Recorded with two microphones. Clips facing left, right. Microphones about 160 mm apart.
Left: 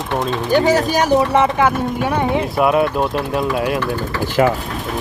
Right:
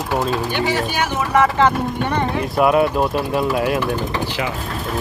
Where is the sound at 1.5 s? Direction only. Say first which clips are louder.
Even; 5° left (ahead or behind).